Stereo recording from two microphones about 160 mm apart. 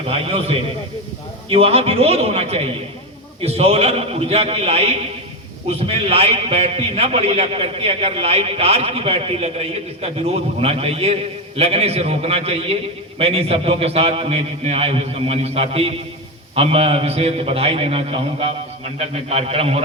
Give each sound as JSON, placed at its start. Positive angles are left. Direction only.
{"t": 0.1, "sound": "a man's voice", "side_deg": -40}